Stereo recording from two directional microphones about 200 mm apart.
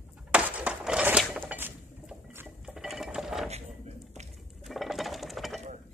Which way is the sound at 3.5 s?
30° right (ahead or behind).